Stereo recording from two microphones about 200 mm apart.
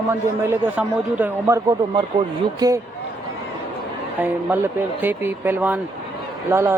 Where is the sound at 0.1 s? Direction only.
10° right (ahead or behind).